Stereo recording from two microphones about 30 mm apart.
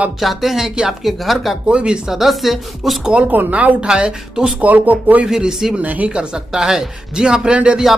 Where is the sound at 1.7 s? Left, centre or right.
Right.